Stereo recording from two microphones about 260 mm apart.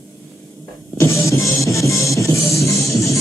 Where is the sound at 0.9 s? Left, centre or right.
Centre.